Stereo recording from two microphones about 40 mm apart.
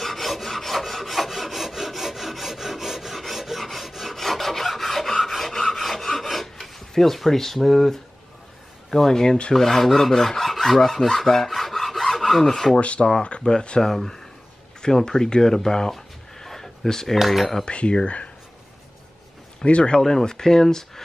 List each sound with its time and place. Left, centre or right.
0.0 s rub: centre
8.9 s speech: centre
9.5 s filing: centre
12.7 s speech: left
15.9 s a sound: centre
17.2 s cutlery: centre
17.6 s speech: left
19.6 s speech: left
20.0 s speech: centre